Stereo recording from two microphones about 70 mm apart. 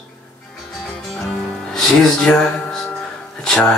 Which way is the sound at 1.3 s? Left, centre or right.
Centre.